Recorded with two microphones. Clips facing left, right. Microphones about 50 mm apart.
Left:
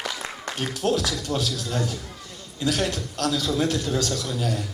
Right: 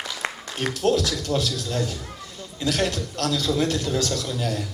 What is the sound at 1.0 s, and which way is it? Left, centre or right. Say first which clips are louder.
Speech: right 2 dB; centre.